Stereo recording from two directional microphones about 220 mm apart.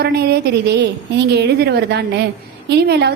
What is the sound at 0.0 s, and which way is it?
Speech, 45° right (ahead or behind).